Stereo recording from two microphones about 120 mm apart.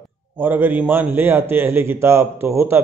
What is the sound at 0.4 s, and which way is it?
A man's voice, 15° right (ahead or behind).